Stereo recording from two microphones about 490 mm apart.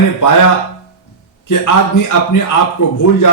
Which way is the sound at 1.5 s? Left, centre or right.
Left.